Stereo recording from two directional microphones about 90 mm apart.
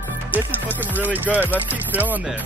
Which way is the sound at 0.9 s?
20° right (ahead or behind).